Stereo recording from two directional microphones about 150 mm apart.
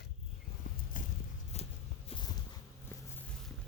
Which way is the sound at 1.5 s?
45° left (ahead or behind).